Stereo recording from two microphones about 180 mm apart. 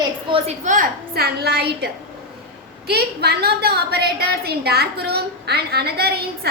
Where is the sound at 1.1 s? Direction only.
60° right (ahead or behind).